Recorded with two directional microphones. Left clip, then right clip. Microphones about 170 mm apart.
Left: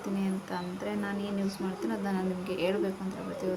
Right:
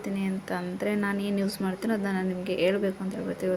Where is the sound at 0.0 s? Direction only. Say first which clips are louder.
Right 2 dB; 25° right (ahead or behind).